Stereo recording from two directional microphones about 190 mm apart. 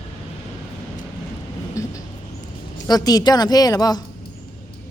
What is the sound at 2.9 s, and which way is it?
A woman's voice, 20° left (ahead or behind).